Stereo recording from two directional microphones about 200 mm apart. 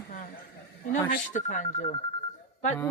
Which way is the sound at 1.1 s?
40° left (ahead or behind).